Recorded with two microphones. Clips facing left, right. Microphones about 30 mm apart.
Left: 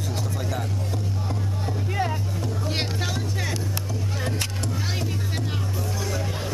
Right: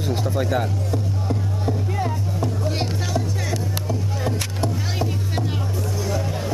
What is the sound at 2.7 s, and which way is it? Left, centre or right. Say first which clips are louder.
Music: right 3 dB; centre.